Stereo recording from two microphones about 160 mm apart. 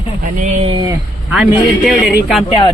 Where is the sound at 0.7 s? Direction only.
30° right (ahead or behind).